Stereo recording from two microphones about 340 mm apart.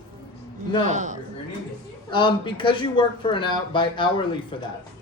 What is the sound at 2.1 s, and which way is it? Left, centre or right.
Speech, centre.